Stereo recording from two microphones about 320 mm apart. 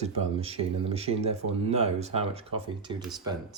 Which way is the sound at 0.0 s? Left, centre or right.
Centre.